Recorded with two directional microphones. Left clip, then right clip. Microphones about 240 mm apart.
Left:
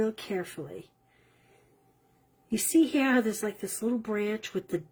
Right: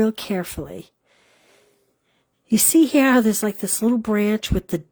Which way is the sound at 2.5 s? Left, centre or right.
Right.